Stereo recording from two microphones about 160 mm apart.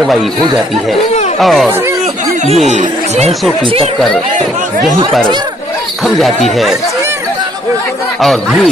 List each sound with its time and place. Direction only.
1.4 s speech: centre (ahead or behind)
2.4 s speech: 45° right (ahead or behind)
6.0 s speech: centre (ahead or behind)